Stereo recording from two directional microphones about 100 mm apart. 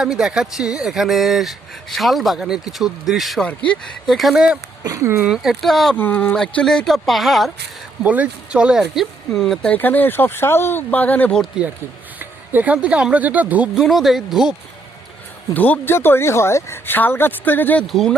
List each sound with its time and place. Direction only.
0.0 s speech: 5° right (ahead or behind)
3.4 s speech: 10° left (ahead or behind)
4.1 s speech: centre (ahead or behind)
4.9 s speech: 30° right (ahead or behind)
5.2 s speech: 5° right (ahead or behind)
6.0 s speech: 20° left (ahead or behind); by 7.5 s centre (ahead or behind)
8.0 s speech: 15° right (ahead or behind); by 9.7 s 5° left (ahead or behind)
9.7 s speech: 20° left (ahead or behind)
11.6 s speech: 10° right (ahead or behind)
13.7 s speech: centre (ahead or behind)
15.5 s speech: 15° left (ahead or behind)
17.8 s speech: 5° left (ahead or behind)